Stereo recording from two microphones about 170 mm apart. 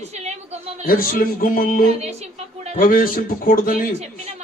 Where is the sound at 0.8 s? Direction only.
55° left (ahead or behind).